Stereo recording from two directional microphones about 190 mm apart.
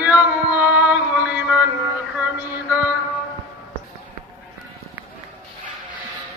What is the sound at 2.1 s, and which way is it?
Mantra, 5° right (ahead or behind).